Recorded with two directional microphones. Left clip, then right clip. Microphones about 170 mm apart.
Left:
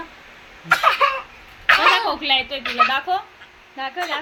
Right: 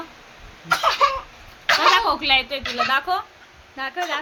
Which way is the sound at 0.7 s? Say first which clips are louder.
Left 2 dB; 15° right (ahead or behind).